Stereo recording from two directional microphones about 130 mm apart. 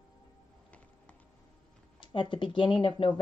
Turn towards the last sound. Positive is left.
turn(degrees=40)  # may be behind; listen again after turning